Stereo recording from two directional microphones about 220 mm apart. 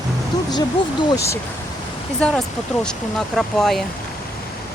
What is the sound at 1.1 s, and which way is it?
Speech, 15° left (ahead or behind).